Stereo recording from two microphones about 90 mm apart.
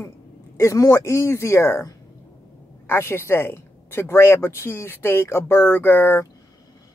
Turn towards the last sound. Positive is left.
turn(degrees=25)  # may be behind; listen again after turning